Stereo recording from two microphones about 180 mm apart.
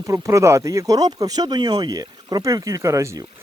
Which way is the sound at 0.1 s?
15° right (ahead or behind).